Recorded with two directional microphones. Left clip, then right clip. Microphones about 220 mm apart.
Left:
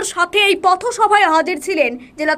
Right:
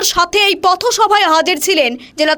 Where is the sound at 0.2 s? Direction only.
55° right (ahead or behind).